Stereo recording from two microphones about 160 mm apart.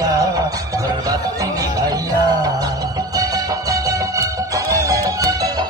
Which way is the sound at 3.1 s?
20° right (ahead or behind).